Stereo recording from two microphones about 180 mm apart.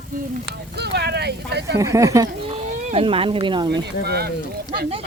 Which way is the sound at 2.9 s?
30° right (ahead or behind).